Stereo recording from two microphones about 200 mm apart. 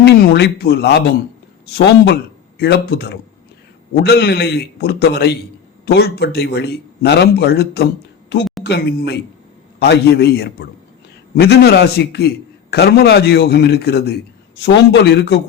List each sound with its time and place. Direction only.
0.0 s a man's voice: 55° left (ahead or behind)